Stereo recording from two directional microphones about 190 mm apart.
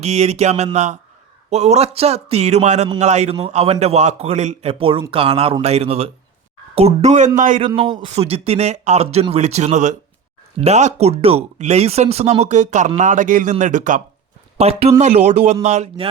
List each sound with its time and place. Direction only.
0.0 s speech: 35° right (ahead or behind)